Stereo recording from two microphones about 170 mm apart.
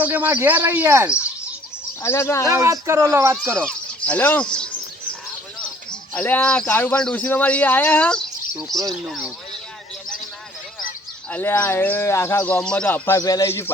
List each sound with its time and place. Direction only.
0.0 s speech: 10° right (ahead or behind)
2.0 s a man's voice: 15° left (ahead or behind)
2.5 s speech: 15° right (ahead or behind)
3.7 s speech: 5° left (ahead or behind)
5.9 s a man's voice: 10° left (ahead or behind)
11.3 s a man's voice: 10° left (ahead or behind)